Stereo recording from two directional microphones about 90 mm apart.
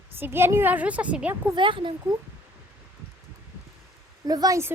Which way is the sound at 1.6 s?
65° right (ahead or behind).